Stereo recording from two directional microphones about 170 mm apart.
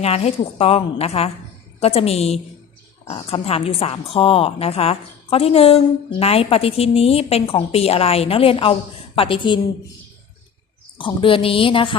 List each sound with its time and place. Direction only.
0.0 s a woman's voice: 40° left (ahead or behind)
10.9 s a woman's voice: 30° left (ahead or behind)